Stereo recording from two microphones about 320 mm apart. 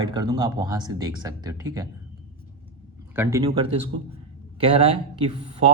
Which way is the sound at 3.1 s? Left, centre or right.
Centre.